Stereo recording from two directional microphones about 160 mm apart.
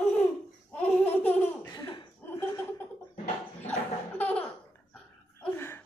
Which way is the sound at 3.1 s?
45° left (ahead or behind).